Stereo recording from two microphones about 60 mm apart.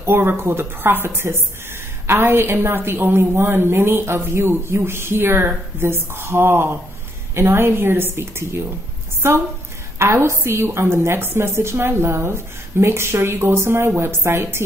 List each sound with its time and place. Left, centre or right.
0.0 s a woman's voice: right